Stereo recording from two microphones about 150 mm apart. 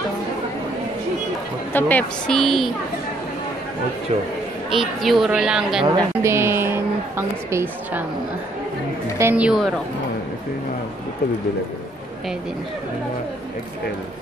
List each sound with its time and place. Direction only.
1.7 s speech: 10° left (ahead or behind)
4.7 s speech: centre (ahead or behind)
5.9 s a woman's voice: 20° right (ahead or behind)
9.2 s a woman's voice: 10° right (ahead or behind)